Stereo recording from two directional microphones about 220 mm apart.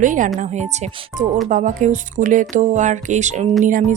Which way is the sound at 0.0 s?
35° right (ahead or behind).